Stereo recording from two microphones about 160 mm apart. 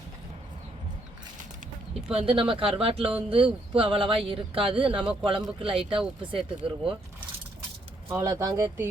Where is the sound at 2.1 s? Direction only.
35° right (ahead or behind).